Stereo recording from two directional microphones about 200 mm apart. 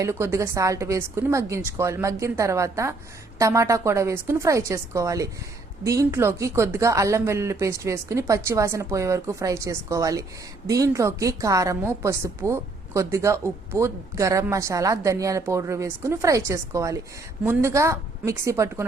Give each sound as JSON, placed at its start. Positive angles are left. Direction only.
{"t": 0.0, "sound": "a woman's voice", "side_deg": -15}